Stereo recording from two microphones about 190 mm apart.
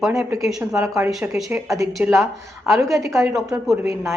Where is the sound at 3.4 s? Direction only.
15° right (ahead or behind).